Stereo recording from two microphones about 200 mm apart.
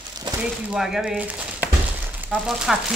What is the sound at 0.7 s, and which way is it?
A man's voice, centre (ahead or behind).